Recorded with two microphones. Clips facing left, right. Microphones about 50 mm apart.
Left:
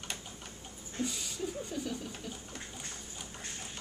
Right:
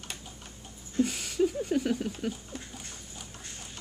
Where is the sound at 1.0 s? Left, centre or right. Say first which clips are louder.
Right 10 dB; right.